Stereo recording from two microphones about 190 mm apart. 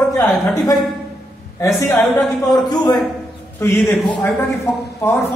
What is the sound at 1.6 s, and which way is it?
A man's voice, 15° left (ahead or behind).